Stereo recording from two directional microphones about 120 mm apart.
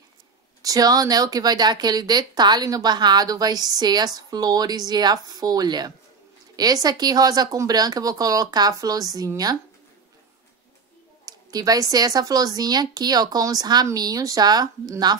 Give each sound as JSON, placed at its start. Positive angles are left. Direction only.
{"t": 0.6, "sound": "speech", "side_deg": -30}
{"t": 11.2, "sound": "a sound", "side_deg": -30}
{"t": 11.9, "sound": "speech", "side_deg": -30}